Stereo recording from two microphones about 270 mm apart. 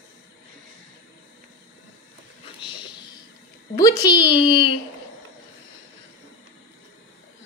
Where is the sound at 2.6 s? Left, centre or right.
Centre.